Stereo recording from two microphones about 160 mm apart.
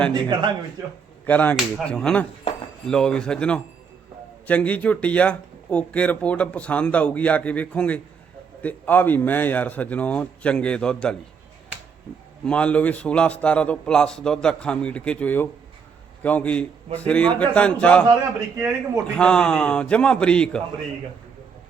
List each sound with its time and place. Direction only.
0.1 s a man's voice: 30° right (ahead or behind)
1.2 s a man's voice: 10° left (ahead or behind)
12.5 s speech: 5° left (ahead or behind)
18.1 s a man's voice: 20° right (ahead or behind)
19.1 s a man's voice: 5° left (ahead or behind)